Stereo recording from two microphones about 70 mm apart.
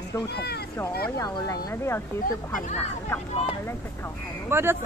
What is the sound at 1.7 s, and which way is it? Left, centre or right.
Speech, left.